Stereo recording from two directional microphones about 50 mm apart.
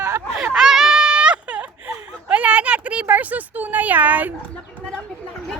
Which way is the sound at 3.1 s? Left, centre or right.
Right.